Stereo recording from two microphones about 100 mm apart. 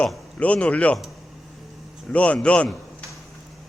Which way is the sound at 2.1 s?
10° left (ahead or behind).